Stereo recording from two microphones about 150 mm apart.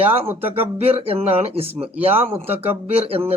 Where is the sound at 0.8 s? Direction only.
40° right (ahead or behind).